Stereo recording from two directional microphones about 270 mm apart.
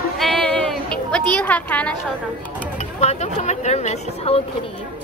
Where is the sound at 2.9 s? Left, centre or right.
Left.